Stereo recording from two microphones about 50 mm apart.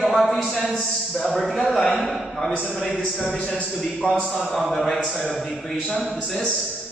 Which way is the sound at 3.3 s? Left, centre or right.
Centre.